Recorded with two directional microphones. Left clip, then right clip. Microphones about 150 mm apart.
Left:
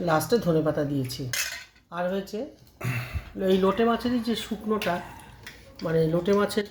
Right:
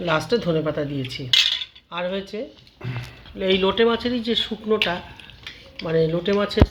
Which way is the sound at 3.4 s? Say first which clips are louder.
Right 4 dB; 30° right (ahead or behind).